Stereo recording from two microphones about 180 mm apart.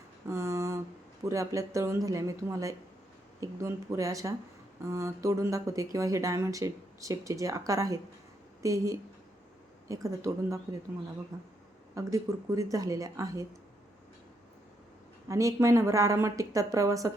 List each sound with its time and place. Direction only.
0.3 s a sound: 15° right (ahead or behind)
1.2 s a woman's voice: 15° right (ahead or behind)
15.3 s speech: 15° right (ahead or behind)